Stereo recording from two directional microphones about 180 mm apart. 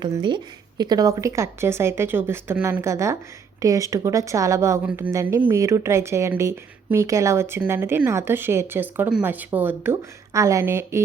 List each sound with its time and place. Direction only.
0.0 s speech: 25° right (ahead or behind)